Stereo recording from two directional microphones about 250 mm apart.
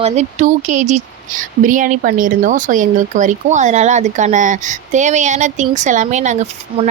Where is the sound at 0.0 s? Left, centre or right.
Right.